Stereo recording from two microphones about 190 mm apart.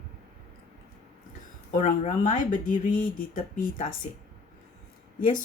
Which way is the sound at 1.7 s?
40° left (ahead or behind).